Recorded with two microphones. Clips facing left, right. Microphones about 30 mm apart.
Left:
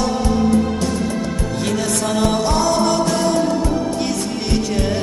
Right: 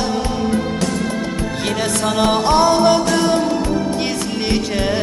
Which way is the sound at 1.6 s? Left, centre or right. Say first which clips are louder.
Right 1 dB; right.